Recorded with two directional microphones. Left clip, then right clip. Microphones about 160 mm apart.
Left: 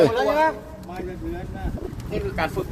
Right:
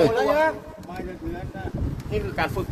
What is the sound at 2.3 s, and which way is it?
Speech, 40° right (ahead or behind).